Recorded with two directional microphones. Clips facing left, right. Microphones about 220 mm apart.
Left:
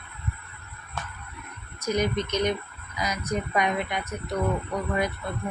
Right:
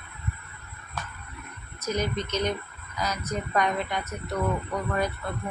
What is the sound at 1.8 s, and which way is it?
Speech, 15° left (ahead or behind).